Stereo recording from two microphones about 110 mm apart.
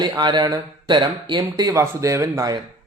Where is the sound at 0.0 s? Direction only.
45° right (ahead or behind).